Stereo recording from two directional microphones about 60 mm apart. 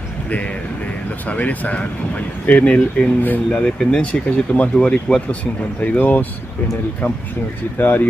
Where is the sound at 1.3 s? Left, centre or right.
Left.